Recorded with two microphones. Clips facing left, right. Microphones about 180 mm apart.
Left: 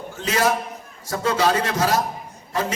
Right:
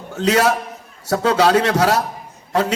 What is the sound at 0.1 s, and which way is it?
A man's voice, 70° right (ahead or behind).